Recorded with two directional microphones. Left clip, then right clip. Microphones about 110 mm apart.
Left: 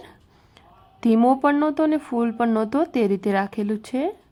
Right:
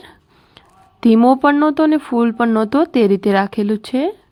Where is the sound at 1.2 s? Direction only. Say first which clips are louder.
Right 6 dB; 20° right (ahead or behind).